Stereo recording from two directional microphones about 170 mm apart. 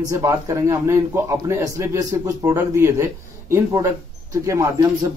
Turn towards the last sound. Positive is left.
turn(degrees=-20)  # may be behind; listen again after turning